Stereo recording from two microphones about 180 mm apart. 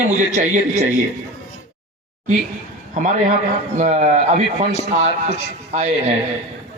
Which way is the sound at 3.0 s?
40° right (ahead or behind).